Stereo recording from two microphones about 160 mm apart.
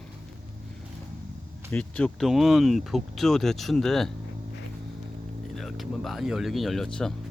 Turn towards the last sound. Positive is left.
turn(degrees=5)  # may be behind; listen again after turning